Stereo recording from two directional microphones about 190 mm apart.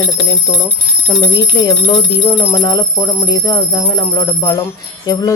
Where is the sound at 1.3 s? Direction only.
20° left (ahead or behind).